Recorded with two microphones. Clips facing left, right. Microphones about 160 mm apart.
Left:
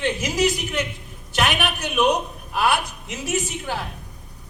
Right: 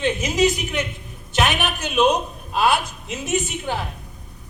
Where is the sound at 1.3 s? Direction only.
20° right (ahead or behind).